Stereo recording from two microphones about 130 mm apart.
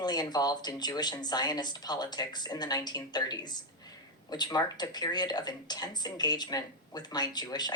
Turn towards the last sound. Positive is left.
turn(degrees=30)  # may be behind; listen again after turning